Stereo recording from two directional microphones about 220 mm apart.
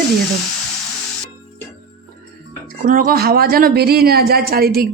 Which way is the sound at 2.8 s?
40° right (ahead or behind).